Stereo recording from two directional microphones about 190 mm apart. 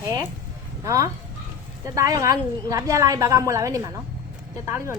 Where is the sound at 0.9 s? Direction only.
15° right (ahead or behind).